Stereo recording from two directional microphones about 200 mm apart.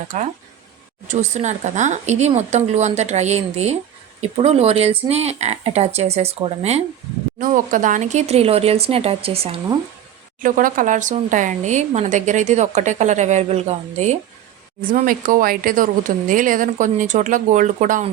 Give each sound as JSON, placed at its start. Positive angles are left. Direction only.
{"t": 0.1, "sound": "speech", "side_deg": -35}
{"t": 10.4, "sound": "speech", "side_deg": -40}
{"t": 14.8, "sound": "speech", "side_deg": -45}